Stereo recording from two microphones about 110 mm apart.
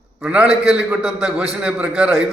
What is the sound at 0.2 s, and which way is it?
A man's voice, 10° right (ahead or behind).